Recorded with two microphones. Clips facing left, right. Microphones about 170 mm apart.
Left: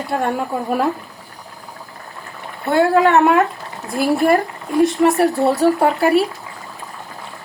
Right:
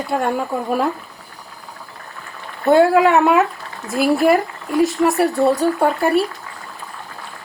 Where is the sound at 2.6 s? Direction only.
15° right (ahead or behind).